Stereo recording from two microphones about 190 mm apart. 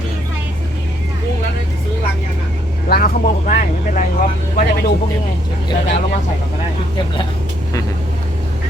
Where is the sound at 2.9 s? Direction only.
50° left (ahead or behind).